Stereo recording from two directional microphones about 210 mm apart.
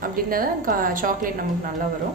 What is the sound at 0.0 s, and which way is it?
A woman's voice, 45° right (ahead or behind).